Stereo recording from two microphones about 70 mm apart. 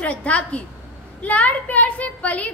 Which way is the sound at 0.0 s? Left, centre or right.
Centre.